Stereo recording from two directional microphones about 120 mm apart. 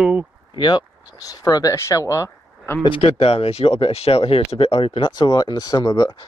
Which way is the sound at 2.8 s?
50° left (ahead or behind).